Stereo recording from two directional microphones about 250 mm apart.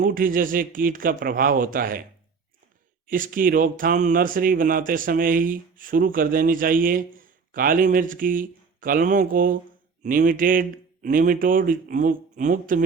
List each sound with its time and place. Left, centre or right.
0.0 s speech: right
3.1 s speech: right